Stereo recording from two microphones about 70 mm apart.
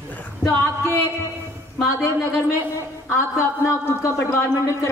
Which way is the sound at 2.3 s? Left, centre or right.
Left.